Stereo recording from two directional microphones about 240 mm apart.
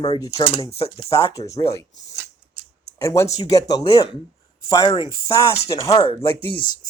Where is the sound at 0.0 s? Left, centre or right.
Centre.